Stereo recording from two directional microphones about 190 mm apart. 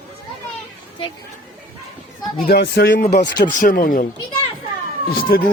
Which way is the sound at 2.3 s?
55° left (ahead or behind).